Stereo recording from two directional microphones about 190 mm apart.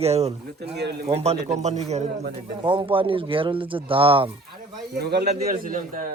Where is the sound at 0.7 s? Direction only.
60° right (ahead or behind).